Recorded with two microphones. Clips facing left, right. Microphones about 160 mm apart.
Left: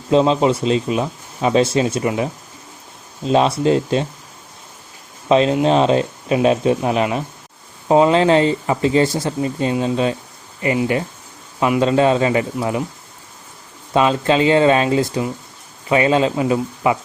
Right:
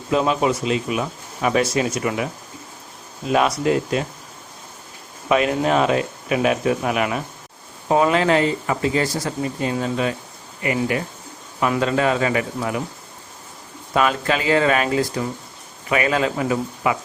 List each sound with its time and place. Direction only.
0.1 s speech: 25° left (ahead or behind)
5.3 s speech: 25° left (ahead or behind)
11.6 s speech: 25° left (ahead or behind)
13.9 s speech: 25° left (ahead or behind)